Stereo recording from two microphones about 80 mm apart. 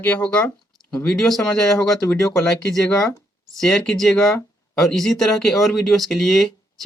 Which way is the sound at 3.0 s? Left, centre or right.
Left.